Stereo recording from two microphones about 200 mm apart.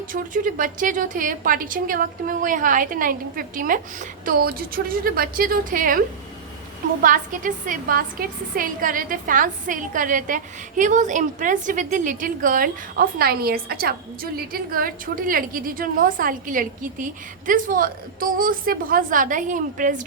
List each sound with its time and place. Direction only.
0.1 s a woman's voice: 40° right (ahead or behind)
7.0 s a woman's voice: 40° right (ahead or behind)